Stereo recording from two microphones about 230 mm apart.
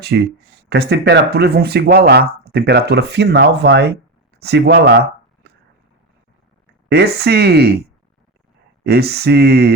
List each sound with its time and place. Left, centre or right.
0.0 s speech: right
6.8 s speech: right
8.8 s speech: right